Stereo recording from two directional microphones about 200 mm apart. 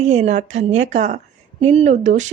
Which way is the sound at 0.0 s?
35° right (ahead or behind).